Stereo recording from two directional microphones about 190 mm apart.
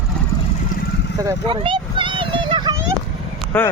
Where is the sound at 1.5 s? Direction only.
25° right (ahead or behind).